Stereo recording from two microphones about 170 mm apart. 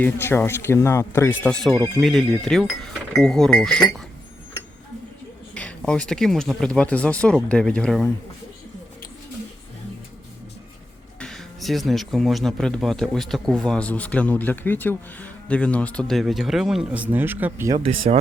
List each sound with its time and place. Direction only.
0.0 s speech: 15° left (ahead or behind)
2.0 s speech: centre (ahead or behind)
5.5 s speech: 5° left (ahead or behind)
11.2 s speech: centre (ahead or behind); by 17.7 s 15° right (ahead or behind)
17.7 s speech: 35° right (ahead or behind)